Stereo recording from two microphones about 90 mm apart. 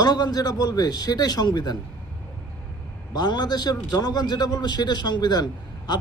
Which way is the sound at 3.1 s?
55° left (ahead or behind).